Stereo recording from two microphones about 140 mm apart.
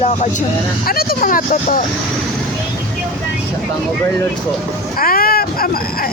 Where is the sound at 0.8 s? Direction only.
90° left.